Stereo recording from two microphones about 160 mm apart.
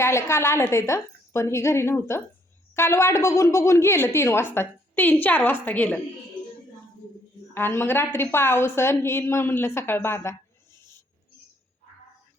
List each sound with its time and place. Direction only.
0.0 s a woman's voice: 15° left (ahead or behind)
7.5 s a woman's voice: 15° left (ahead or behind)